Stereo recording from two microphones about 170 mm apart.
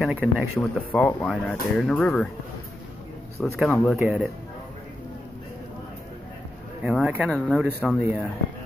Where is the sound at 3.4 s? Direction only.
Centre (ahead or behind).